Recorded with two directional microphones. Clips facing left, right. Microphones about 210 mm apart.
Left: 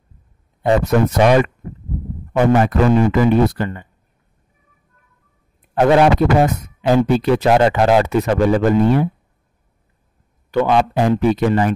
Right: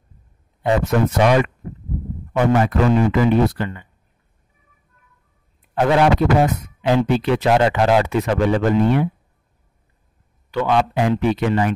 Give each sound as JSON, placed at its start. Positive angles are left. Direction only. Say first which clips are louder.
{"t": 0.6, "sound": "a man's voice", "louder": "left 3 dB", "side_deg": 40}
{"t": 5.6, "sound": "a man's voice", "louder": "left 4 dB", "side_deg": 50}
{"t": 10.5, "sound": "a man's voice", "louder": "left 3 dB", "side_deg": 50}